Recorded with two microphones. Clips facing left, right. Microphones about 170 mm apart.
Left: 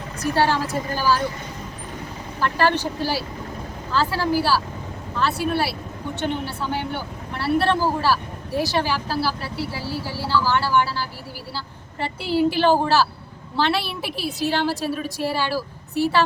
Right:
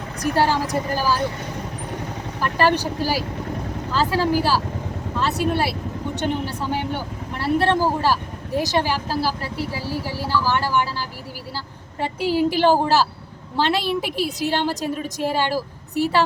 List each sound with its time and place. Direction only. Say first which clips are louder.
0.2 s speech: right 1 dB; 15° right (ahead or behind)
2.4 s speech: right 1 dB; 15° right (ahead or behind)